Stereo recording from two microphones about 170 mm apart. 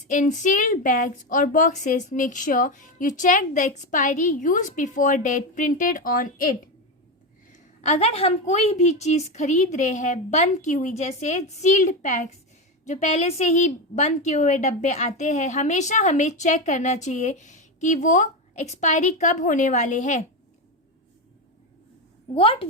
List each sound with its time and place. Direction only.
0.1 s a woman's voice: 50° left (ahead or behind)
7.5 s a woman's voice: 40° left (ahead or behind)
22.4 s a woman's voice: 35° left (ahead or behind)